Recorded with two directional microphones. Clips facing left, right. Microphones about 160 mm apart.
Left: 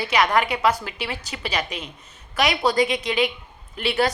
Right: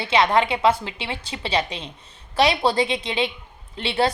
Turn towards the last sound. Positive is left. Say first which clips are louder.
# even
turn(degrees=-25)  # may be behind; listen again after turning